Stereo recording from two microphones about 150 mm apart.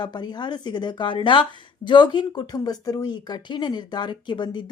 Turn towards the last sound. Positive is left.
turn(degrees=30)  # may be behind; listen again after turning